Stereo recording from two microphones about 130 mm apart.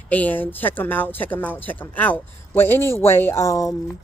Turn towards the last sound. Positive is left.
turn(degrees=25)  # may be behind; listen again after turning